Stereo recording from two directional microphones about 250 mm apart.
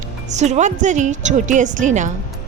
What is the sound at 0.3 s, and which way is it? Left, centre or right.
A woman's voice, right.